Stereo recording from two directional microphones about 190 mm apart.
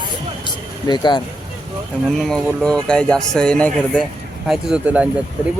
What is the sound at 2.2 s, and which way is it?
Speech, 5° left (ahead or behind).